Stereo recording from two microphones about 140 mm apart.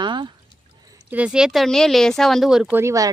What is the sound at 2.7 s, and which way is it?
Speech, 20° right (ahead or behind).